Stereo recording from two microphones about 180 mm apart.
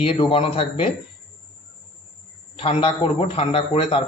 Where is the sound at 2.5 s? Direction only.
30° left (ahead or behind).